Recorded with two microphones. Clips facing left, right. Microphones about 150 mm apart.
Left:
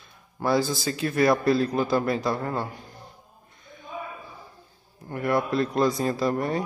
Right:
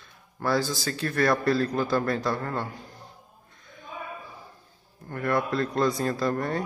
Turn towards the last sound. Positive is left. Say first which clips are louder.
# left 2 dB
turn(degrees=10)  # may be behind; listen again after turning